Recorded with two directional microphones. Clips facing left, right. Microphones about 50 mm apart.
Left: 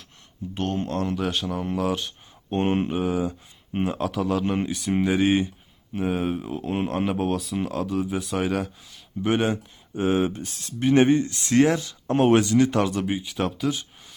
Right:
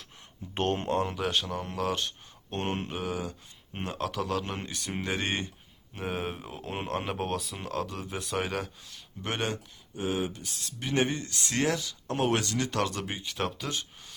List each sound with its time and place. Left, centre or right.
0.5 s speech: right
1.0 s speech: centre
2.5 s speech: centre
9.9 s speech: left
12.4 s speech: centre